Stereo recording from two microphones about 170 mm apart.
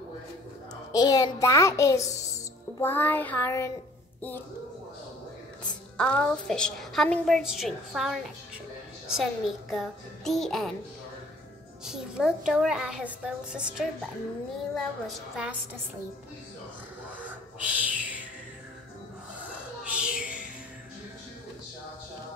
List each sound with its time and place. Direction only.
0.9 s a child's voice: 25° left (ahead or behind)
2.8 s child singing: 10° left (ahead or behind)
5.7 s a woman's voice: 5° left (ahead or behind)
11.8 s a woman's voice: 5° right (ahead or behind)
17.6 s music: 10° right (ahead or behind)
19.9 s music: 5° right (ahead or behind)